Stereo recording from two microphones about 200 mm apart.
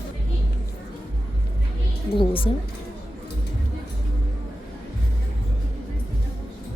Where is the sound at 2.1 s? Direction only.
25° left (ahead or behind).